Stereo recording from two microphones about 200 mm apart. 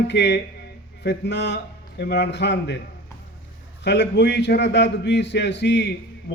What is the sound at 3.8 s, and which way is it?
A man's voice, 60° left (ahead or behind).